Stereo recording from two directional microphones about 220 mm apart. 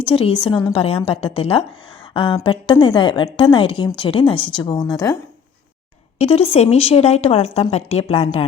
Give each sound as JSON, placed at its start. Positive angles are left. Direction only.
{"t": 0.0, "sound": "a woman's voice", "side_deg": 25}
{"t": 6.1, "sound": "a woman's voice", "side_deg": 25}